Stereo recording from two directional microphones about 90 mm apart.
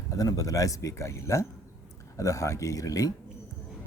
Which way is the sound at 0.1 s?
40° left (ahead or behind).